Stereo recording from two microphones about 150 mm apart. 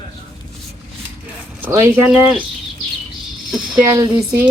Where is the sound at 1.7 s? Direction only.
20° right (ahead or behind).